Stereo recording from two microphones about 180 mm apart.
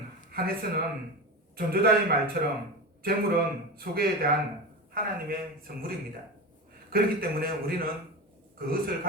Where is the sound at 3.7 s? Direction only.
55° right (ahead or behind).